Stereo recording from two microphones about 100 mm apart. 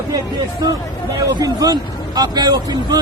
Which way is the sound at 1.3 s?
40° right (ahead or behind).